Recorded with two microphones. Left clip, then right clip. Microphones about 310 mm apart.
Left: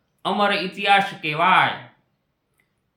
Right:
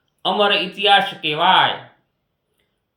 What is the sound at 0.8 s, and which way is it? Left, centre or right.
Speech, left.